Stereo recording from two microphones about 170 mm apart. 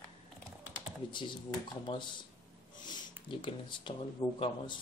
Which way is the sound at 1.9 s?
30° left (ahead or behind).